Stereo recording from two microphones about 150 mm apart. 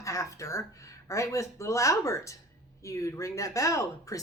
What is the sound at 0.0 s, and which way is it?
Speech, 20° left (ahead or behind).